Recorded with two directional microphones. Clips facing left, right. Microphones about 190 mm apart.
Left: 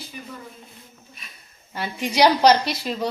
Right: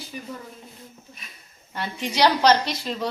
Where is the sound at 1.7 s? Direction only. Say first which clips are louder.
Left 3 dB; 10° left (ahead or behind).